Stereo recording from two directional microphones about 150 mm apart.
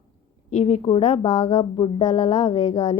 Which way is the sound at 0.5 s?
45° left (ahead or behind).